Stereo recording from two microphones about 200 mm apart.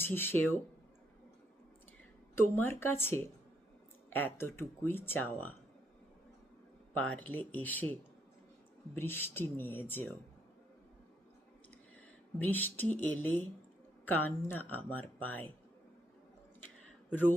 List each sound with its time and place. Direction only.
0.0 s speech: 10° left (ahead or behind)
2.3 s speech: 10° left (ahead or behind)
6.9 s speech: 5° left (ahead or behind)
9.0 s speech: 10° left (ahead or behind)
12.4 s speech: 10° left (ahead or behind)